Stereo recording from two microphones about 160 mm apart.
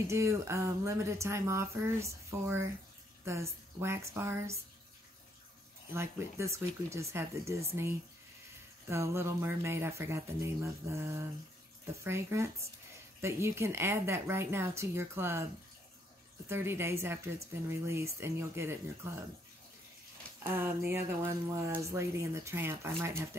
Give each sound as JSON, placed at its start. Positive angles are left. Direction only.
{"t": 0.1, "sound": "speech", "side_deg": -20}
{"t": 5.9, "sound": "speech", "side_deg": -15}
{"t": 8.8, "sound": "speech", "side_deg": -15}
{"t": 16.4, "sound": "speech", "side_deg": -15}
{"t": 20.4, "sound": "speech", "side_deg": -15}